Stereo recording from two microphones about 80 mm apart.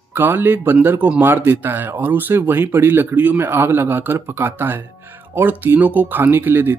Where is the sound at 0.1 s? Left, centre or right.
Right.